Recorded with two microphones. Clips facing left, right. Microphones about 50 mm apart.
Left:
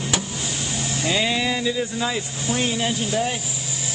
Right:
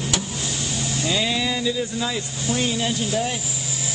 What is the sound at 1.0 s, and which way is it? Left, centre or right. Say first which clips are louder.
Speech: left 2 dB; left.